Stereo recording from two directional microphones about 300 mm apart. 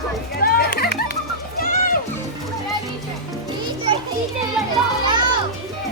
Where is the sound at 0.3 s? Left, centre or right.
Left.